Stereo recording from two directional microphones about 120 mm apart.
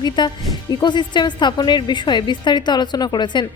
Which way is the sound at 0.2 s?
40° left (ahead or behind).